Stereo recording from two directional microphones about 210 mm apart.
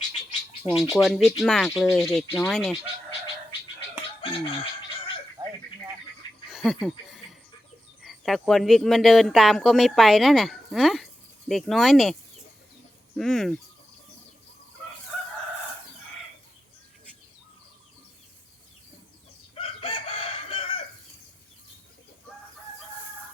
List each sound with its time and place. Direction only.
0.6 s speech: 5° right (ahead or behind)
4.2 s a sound: 25° left (ahead or behind)
5.4 s bird: 15° right (ahead or behind)
6.5 s speech: centre (ahead or behind)
8.0 s speech: centre (ahead or behind)
13.1 s speech: centre (ahead or behind)
19.5 s chicken: 25° left (ahead or behind)